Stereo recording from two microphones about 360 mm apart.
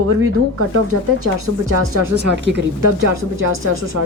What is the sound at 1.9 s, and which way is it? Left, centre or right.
Speech, right.